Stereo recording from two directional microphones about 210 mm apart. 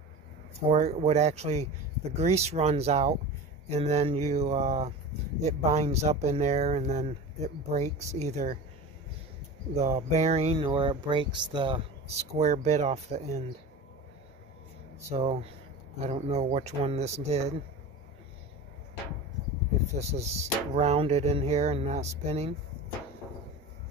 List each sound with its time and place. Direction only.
0.7 s speech: 30° right (ahead or behind)
9.8 s speech: 30° right (ahead or behind)
15.1 s speech: 30° right (ahead or behind)
20.0 s speech: 30° right (ahead or behind)